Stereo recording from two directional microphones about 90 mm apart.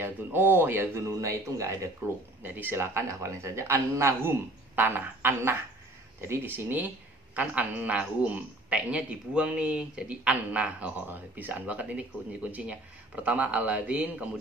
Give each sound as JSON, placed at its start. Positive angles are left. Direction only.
{"t": 0.0, "sound": "a man's voice", "side_deg": -25}
{"t": 2.4, "sound": "a man's voice", "side_deg": -20}